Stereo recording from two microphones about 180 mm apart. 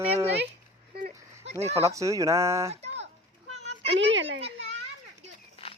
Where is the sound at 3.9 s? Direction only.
90° right.